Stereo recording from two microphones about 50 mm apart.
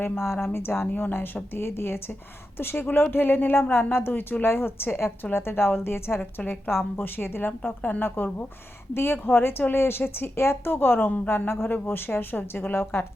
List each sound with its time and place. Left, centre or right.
0.0 s speech: left
0.9 s a woman's voice: left
1.5 s a woman's voice: left
6.1 s a woman's voice: left
9.4 s a woman's voice: left
12.7 s a woman's voice: left